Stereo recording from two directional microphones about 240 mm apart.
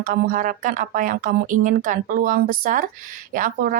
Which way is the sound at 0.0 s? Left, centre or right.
Right.